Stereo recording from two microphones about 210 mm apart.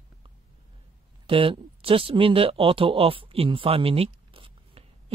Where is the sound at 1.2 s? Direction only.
25° right (ahead or behind).